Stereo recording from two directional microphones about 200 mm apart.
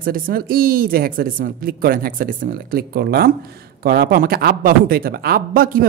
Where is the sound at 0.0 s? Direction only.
50° right (ahead or behind).